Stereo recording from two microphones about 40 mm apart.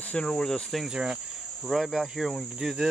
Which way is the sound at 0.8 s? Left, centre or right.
Right.